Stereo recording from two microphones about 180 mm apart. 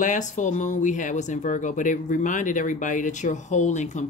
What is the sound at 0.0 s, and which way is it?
Speech, 45° left (ahead or behind).